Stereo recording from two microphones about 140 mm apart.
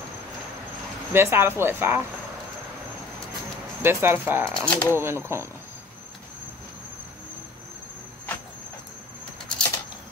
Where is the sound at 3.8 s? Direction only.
15° right (ahead or behind).